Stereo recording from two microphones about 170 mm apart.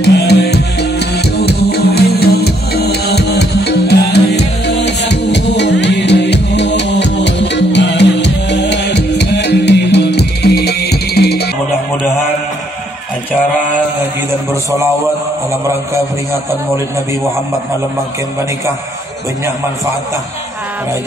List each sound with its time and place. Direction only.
0.0 s music: 75° left (ahead or behind)